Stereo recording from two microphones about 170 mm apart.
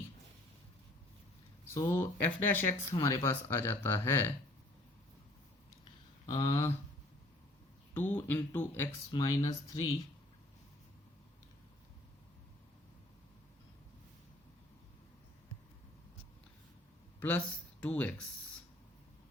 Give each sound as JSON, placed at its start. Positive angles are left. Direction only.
{"t": 1.7, "sound": "speech", "side_deg": 15}
{"t": 6.2, "sound": "speech", "side_deg": 25}
{"t": 7.9, "sound": "speech", "side_deg": 10}
{"t": 17.2, "sound": "speech", "side_deg": 10}